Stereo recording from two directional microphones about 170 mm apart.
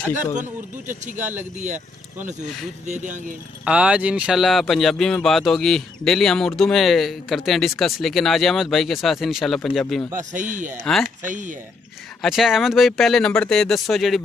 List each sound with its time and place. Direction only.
0.1 s speech: 10° right (ahead or behind)
2.9 s speech: 50° right (ahead or behind)
3.6 s speech: 5° right (ahead or behind)
10.1 s speech: 50° right (ahead or behind)
10.8 s speech: 5° left (ahead or behind)
11.2 s speech: 50° right (ahead or behind)
12.2 s speech: centre (ahead or behind)